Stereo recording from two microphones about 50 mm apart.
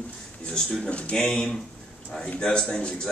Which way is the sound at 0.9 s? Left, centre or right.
Centre.